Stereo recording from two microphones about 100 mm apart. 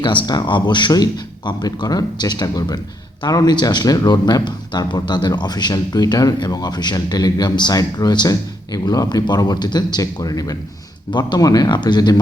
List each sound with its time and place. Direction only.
0.3 s speech: 45° left (ahead or behind)